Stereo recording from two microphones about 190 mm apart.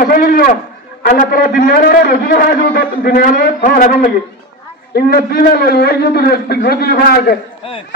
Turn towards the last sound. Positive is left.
turn(degrees=50)  # may be behind; listen again after turning